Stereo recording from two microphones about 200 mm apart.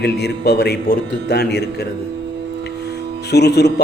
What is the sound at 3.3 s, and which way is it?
Speech, 55° left (ahead or behind).